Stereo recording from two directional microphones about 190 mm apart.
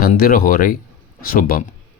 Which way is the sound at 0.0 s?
50° left (ahead or behind).